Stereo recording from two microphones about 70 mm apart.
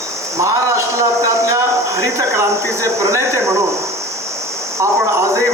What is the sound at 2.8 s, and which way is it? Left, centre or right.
Speech, right.